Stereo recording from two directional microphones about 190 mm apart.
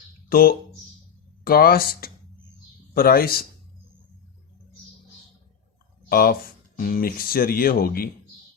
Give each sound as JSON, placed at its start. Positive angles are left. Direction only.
{"t": 0.3, "sound": "speech", "side_deg": 50}
{"t": 6.1, "sound": "speech", "side_deg": 50}